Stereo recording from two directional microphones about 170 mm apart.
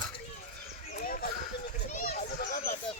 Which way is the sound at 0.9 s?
55° left (ahead or behind).